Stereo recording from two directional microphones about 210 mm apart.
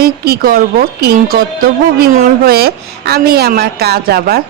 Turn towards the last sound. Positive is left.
turn(degrees=-45)  # may be behind; listen again after turning